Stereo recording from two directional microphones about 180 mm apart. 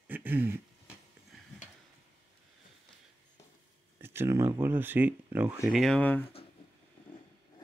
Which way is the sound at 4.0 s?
15° right (ahead or behind).